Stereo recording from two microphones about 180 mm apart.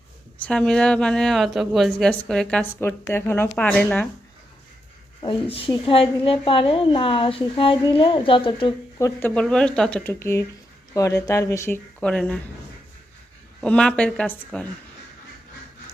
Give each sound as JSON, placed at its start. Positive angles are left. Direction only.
{"t": 0.3, "sound": "a woman's voice", "side_deg": 5}
{"t": 5.2, "sound": "a woman's voice", "side_deg": 30}
{"t": 9.0, "sound": "speech", "side_deg": 15}
{"t": 9.3, "sound": "speech", "side_deg": 5}
{"t": 13.6, "sound": "a woman's voice", "side_deg": 5}